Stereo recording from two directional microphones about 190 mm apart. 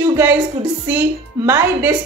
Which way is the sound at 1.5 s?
10° right (ahead or behind).